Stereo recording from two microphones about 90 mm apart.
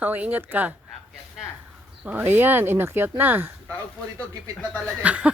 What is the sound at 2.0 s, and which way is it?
Speech, 25° right (ahead or behind).